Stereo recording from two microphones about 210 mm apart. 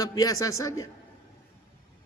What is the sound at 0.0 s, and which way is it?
Speech, 15° left (ahead or behind).